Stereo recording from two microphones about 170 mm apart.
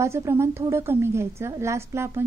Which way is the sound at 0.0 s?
15° right (ahead or behind).